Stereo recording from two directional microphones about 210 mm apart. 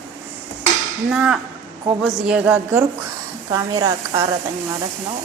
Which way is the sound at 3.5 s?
20° right (ahead or behind).